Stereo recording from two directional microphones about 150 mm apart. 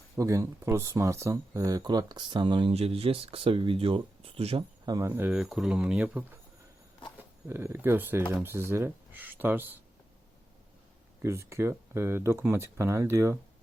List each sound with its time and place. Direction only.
0.2 s speech: 20° right (ahead or behind); by 4.6 s 40° right (ahead or behind)
4.9 s speech: 20° right (ahead or behind)
7.4 s speech: 15° right (ahead or behind)
11.2 s speech: 20° right (ahead or behind)